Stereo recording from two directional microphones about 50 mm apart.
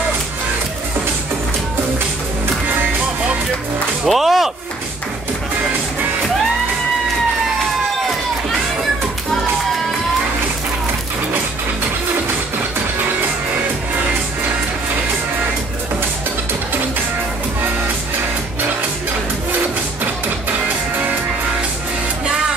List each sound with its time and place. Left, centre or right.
4.0 s speech: centre